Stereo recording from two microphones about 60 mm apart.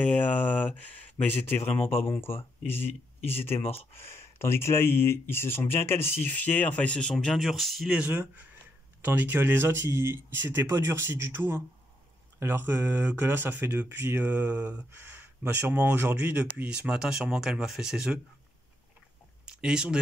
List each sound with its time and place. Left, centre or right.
0.0 s speech: left
1.5 s speech: left
6.3 s speech: left
7.2 s speech: centre
8.1 s speech: right
14.9 s speech: right
15.7 s speech: right; by 18.2 s centre
19.4 s speech: centre